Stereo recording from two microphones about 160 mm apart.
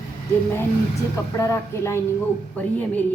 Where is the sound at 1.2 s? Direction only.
20° left (ahead or behind).